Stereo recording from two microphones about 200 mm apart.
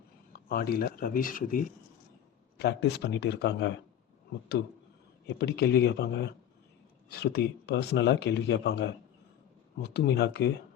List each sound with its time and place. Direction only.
0.3 s speech: 50° left (ahead or behind)
2.6 s speech: 55° left (ahead or behind)
5.4 s speech: 55° left (ahead or behind)